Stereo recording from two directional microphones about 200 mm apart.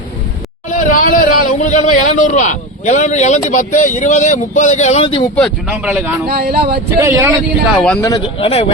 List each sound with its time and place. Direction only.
0.7 s speech: 40° left (ahead or behind)
5.4 s speech: 5° right (ahead or behind)
6.2 s speech: 50° right (ahead or behind)
7.0 s speech: 15° right (ahead or behind)
8.0 s a man's voice: 25° left (ahead or behind)